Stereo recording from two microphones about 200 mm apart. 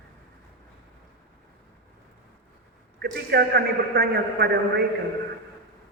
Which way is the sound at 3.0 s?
55° right (ahead or behind).